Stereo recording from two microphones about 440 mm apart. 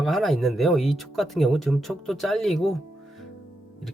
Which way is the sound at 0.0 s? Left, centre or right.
Centre.